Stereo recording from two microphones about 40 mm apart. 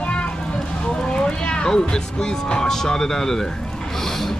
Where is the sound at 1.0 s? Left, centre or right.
Left.